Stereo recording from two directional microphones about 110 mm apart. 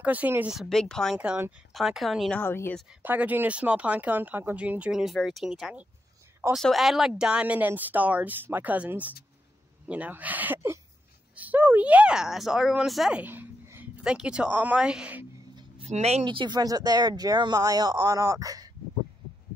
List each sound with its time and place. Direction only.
0.0 s speech: 15° right (ahead or behind)
0.6 s speech: 5° left (ahead or behind)
1.1 s speech: 10° right (ahead or behind)
1.7 s speech: centre (ahead or behind)
2.3 s speech: 20° left (ahead or behind)
3.0 s speech: 15° right (ahead or behind)
13.2 s a sound: 20° right (ahead or behind)
14.0 s speech: 10° right (ahead or behind)
15.8 s speech: 75° right (ahead or behind)
16.3 s speech: 45° right (ahead or behind)